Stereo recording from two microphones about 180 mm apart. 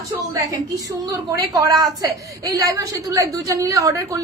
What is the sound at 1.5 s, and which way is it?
A woman's voice, 20° right (ahead or behind).